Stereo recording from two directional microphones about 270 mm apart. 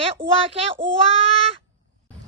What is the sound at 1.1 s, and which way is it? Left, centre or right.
Child singing, right.